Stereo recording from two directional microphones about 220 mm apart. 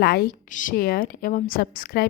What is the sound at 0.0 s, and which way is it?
A woman's voice, 45° left (ahead or behind).